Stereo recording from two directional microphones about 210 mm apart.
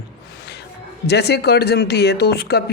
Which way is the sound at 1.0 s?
50° left (ahead or behind).